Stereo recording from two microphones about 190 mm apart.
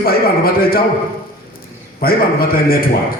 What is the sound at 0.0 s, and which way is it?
Speech, 50° left (ahead or behind).